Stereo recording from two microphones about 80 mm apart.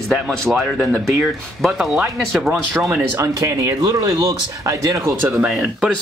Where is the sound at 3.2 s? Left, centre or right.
Right.